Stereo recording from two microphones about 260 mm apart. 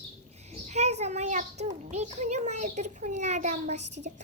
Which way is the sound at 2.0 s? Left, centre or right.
Right.